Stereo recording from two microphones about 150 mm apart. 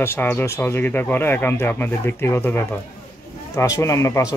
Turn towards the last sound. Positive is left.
turn(degrees=20)  # may be behind; listen again after turning